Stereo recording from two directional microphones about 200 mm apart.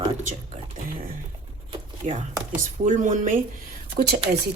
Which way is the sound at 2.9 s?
40° right (ahead or behind).